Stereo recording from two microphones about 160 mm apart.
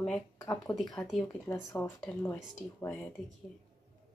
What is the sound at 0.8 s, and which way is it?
Speech, 25° left (ahead or behind).